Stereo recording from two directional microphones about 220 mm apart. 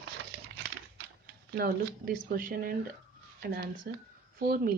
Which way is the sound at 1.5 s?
40° right (ahead or behind).